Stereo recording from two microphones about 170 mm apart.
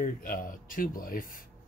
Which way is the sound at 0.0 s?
55° left (ahead or behind).